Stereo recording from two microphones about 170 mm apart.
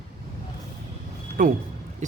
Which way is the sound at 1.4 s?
55° right (ahead or behind).